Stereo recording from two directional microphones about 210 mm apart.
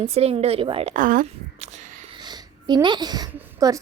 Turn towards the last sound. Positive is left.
turn(degrees=-15)  # may be behind; listen again after turning